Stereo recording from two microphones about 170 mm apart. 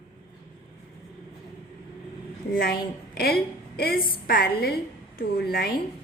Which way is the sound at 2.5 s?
60° left (ahead or behind).